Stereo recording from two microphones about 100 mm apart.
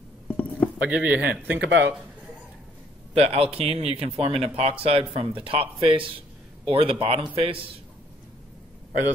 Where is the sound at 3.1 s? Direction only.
85° right.